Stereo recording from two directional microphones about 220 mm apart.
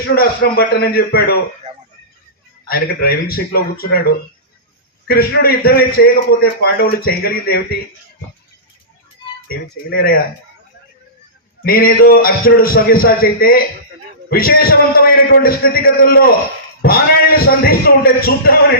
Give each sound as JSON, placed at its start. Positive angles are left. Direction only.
{"t": 0.2, "sound": "a man's voice", "side_deg": 45}
{"t": 2.6, "sound": "a man's voice", "side_deg": 40}
{"t": 5.0, "sound": "a man's voice", "side_deg": 45}
{"t": 9.9, "sound": "a man's voice", "side_deg": 45}
{"t": 11.6, "sound": "a man's voice", "side_deg": 40}